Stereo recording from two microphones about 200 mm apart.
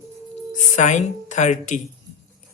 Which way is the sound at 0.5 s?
35° left (ahead or behind).